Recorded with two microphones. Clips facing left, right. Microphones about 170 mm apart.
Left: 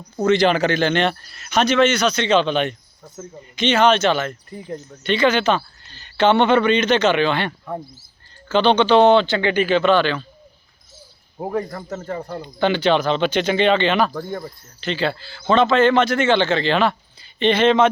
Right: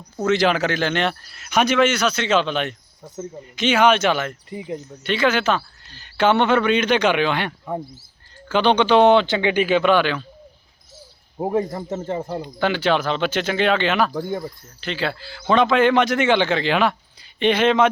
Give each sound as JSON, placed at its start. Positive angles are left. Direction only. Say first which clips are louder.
{"t": 0.2, "sound": "speech", "louder": "left 2 dB", "side_deg": -5}
{"t": 11.3, "sound": "speech", "louder": "right 3 dB", "side_deg": -20}
{"t": 12.4, "sound": "speech", "louder": "left 6 dB", "side_deg": -5}
{"t": 14.8, "sound": "speech", "louder": "left 3 dB", "side_deg": -5}